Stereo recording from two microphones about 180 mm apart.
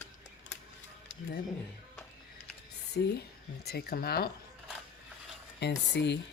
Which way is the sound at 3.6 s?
60° left (ahead or behind).